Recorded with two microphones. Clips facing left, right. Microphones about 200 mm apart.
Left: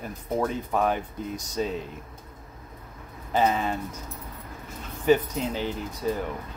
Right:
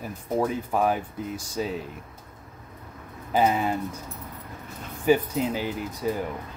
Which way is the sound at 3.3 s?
10° right (ahead or behind).